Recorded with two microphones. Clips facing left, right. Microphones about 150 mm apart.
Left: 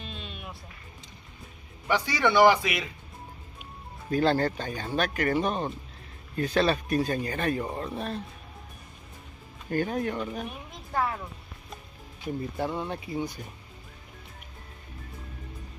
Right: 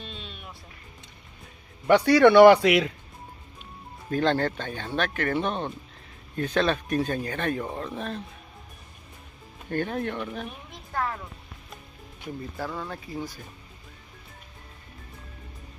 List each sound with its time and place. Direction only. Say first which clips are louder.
0.0 s music: left 1 dB; 5° left (ahead or behind)
1.9 s speech: right 9 dB; 65° right (ahead or behind)
4.1 s speech: even; 5° left (ahead or behind)
9.7 s speech: left 1 dB; 5° left (ahead or behind)
12.5 s speech: left 1 dB; 25° left (ahead or behind)